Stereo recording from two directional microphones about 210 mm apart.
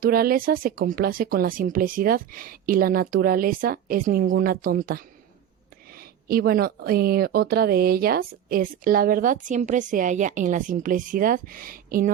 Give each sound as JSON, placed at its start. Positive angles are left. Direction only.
{"t": 0.0, "sound": "speech", "side_deg": -45}
{"t": 6.2, "sound": "speech", "side_deg": -45}